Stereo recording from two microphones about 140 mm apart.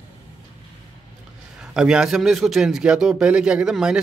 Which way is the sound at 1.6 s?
5° right (ahead or behind).